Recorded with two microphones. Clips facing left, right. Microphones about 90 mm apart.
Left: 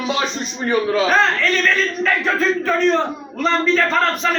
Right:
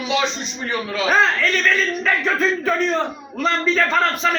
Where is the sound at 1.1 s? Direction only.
5° right (ahead or behind).